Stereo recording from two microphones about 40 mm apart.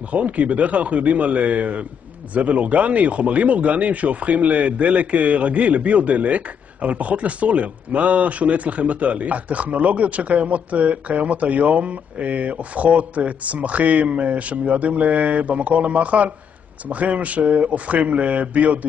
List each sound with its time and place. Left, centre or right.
0.1 s speech: right